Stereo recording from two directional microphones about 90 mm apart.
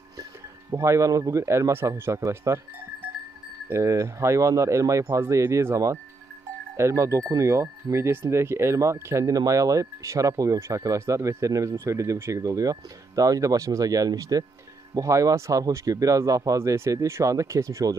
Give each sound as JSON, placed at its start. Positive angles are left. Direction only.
{"t": 0.2, "sound": "speech", "side_deg": -35}
{"t": 3.6, "sound": "speech", "side_deg": -30}